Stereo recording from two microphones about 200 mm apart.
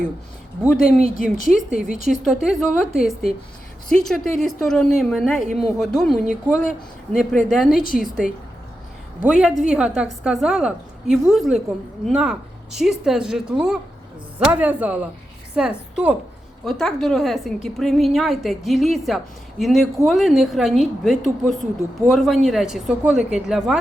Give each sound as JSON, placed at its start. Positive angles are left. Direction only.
{"t": 1.0, "sound": "a woman's voice", "side_deg": 45}
{"t": 2.2, "sound": "a woman's voice", "side_deg": 0}